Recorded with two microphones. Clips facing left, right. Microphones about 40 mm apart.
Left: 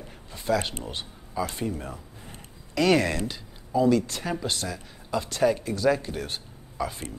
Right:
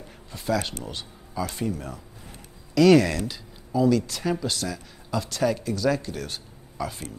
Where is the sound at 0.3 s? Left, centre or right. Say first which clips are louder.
Even; centre.